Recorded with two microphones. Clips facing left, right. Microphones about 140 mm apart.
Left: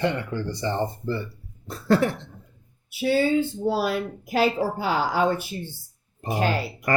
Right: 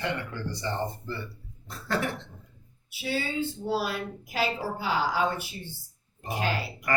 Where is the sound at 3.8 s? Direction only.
50° left (ahead or behind).